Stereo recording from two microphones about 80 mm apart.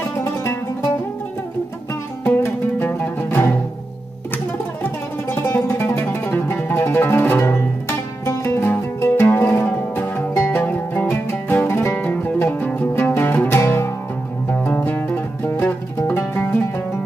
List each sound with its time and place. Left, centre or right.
2.2 s music: left
5.7 s music: left
8.5 s music: left